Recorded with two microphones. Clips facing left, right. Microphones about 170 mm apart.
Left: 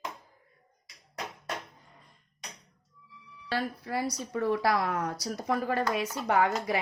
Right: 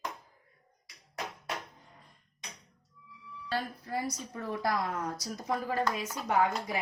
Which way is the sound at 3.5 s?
70° left (ahead or behind).